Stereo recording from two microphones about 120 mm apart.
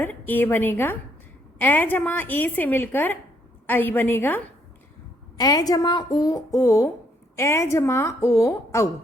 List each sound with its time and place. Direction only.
0.0 s a woman's voice: 15° left (ahead or behind)
5.4 s a woman's voice: 30° left (ahead or behind)